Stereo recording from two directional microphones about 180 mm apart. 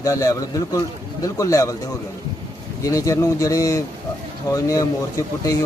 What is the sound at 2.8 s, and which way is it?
Speech, 20° left (ahead or behind).